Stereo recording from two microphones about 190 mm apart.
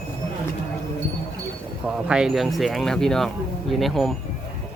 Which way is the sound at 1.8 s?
5° right (ahead or behind).